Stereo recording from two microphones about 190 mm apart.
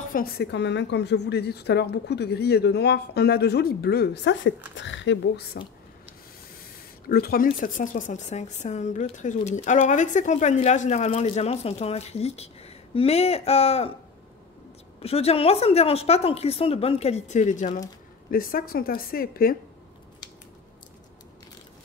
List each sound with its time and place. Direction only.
0.1 s a woman's voice: 55° left (ahead or behind)
7.1 s a woman's voice: 55° left (ahead or behind); by 13.9 s 30° left (ahead or behind)
15.0 s a woman's voice: 30° left (ahead or behind); by 19.5 s 50° left (ahead or behind)